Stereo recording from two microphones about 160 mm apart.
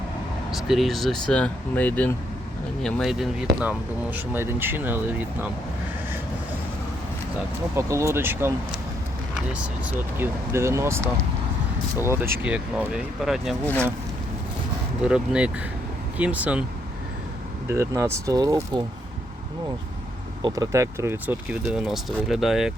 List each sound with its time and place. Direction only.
0.5 s speech: centre (ahead or behind)
7.8 s speech: 20° right (ahead or behind); by 13.6 s centre (ahead or behind)
15.0 s speech: 5° right (ahead or behind)
17.7 s speech: 15° right (ahead or behind)
20.4 s speech: 20° right (ahead or behind); by 22.7 s centre (ahead or behind)